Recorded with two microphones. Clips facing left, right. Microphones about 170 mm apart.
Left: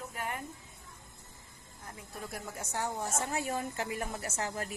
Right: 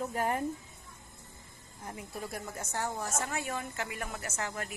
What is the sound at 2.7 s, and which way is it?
Speech, 15° left (ahead or behind).